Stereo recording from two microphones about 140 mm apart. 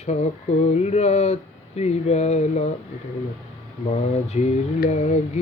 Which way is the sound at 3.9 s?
50° left (ahead or behind).